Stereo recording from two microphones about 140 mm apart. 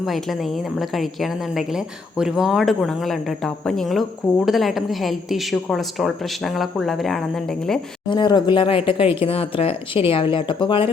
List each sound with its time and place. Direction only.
0.0 s a woman's voice: centre (ahead or behind)
8.1 s speech: 30° left (ahead or behind)